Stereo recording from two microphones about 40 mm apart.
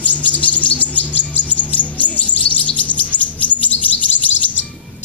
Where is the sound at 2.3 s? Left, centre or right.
Left.